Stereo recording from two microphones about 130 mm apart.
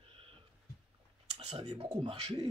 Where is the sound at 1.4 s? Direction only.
55° right (ahead or behind).